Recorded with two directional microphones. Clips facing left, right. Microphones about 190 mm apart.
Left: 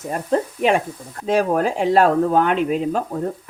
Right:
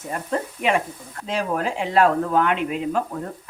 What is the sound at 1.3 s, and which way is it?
Speech, 45° left (ahead or behind).